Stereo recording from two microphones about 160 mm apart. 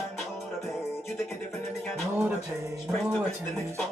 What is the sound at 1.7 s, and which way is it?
Music, 5° right (ahead or behind).